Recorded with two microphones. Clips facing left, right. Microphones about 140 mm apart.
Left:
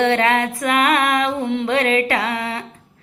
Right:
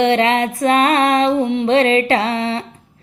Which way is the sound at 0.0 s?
20° right (ahead or behind).